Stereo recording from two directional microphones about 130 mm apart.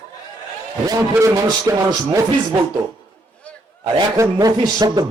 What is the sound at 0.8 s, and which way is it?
A man's voice, 30° right (ahead or behind).